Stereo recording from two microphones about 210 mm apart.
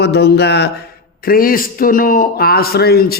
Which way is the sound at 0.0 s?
50° left (ahead or behind).